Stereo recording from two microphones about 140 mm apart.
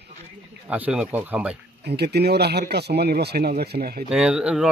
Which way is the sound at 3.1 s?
90° right.